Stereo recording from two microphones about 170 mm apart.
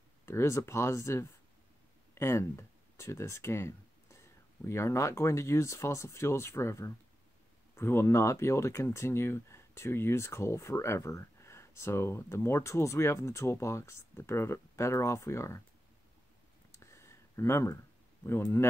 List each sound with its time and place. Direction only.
0.2 s speech: 15° left (ahead or behind)
16.7 s a sound: 15° left (ahead or behind)
18.2 s speech: 15° left (ahead or behind)